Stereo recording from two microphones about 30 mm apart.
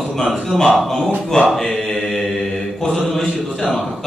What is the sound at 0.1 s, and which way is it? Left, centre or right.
A man's voice, centre.